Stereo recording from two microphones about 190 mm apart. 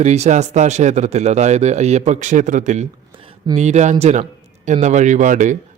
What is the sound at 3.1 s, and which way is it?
Speech, 25° right (ahead or behind).